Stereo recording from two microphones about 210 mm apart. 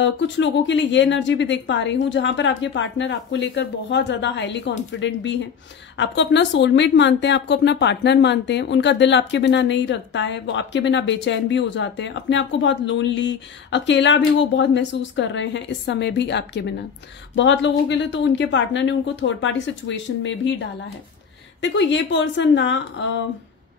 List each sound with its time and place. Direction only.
0.0 s speech: 60° left (ahead or behind)